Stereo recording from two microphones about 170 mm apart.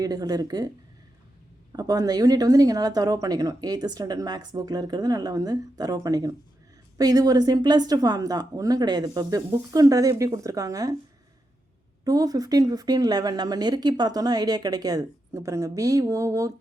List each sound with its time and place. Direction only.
0.0 s speech: 20° right (ahead or behind)
1.7 s speech: 20° right (ahead or behind)
12.0 s speech: 20° right (ahead or behind)